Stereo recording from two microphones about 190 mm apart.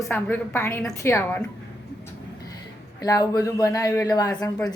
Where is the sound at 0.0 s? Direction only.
10° left (ahead or behind).